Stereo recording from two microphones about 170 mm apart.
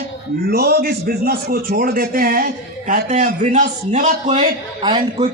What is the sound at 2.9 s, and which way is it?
A man's voice, 45° right (ahead or behind).